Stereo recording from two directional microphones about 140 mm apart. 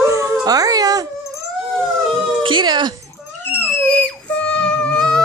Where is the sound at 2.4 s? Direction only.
35° right (ahead or behind).